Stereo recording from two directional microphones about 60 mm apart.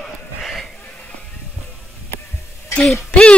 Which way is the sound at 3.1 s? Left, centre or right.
Centre.